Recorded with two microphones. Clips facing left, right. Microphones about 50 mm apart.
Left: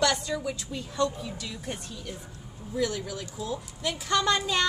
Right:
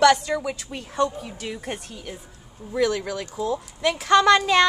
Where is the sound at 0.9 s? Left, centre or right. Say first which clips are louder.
Right 4 dB; right.